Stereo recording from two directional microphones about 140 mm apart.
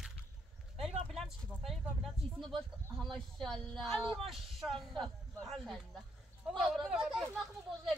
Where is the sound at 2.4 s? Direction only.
Centre (ahead or behind).